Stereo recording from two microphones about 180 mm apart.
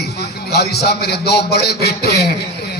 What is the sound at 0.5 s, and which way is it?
Speech, 65° left (ahead or behind).